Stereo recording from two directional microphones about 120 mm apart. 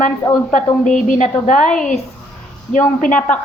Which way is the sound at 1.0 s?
90° left.